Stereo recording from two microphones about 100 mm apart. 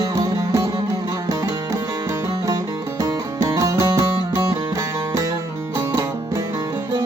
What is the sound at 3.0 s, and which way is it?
Music, 35° right (ahead or behind).